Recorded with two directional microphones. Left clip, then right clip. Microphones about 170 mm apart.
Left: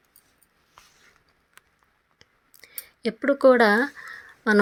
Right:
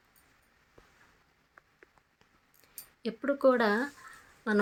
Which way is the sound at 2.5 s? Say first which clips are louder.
Left 10 dB; 45° left (ahead or behind).